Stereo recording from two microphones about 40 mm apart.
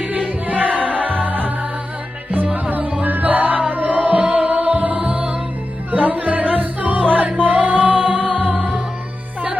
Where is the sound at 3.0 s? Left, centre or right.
Right.